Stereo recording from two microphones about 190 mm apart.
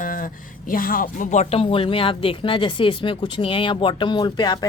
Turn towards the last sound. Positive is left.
turn(degrees=20)  # may be behind; listen again after turning